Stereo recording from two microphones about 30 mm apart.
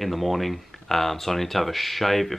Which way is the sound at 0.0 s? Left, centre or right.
Centre.